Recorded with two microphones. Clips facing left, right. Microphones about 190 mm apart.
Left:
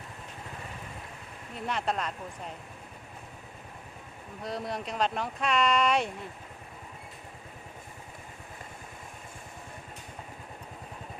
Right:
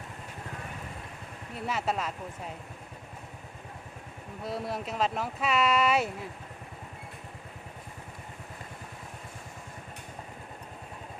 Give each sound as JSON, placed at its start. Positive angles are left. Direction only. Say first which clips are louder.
{"t": 1.5, "sound": "speech", "louder": "even", "side_deg": -5}
{"t": 4.4, "sound": "speech", "louder": "right 1 dB", "side_deg": -5}